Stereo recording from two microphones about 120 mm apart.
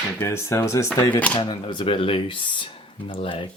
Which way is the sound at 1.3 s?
40° left (ahead or behind).